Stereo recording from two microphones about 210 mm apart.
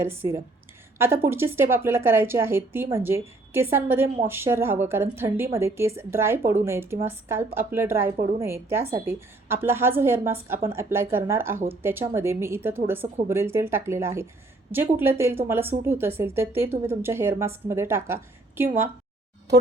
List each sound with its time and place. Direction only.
0.0 s a woman's voice: 10° right (ahead or behind)
8.1 s a woman's voice: 35° right (ahead or behind)
8.4 s a woman's voice: 10° right (ahead or behind)